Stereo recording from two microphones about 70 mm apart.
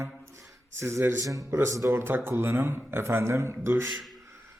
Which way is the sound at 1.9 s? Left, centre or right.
Right.